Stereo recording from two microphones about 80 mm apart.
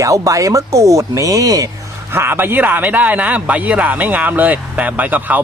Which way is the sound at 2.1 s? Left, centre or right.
Right.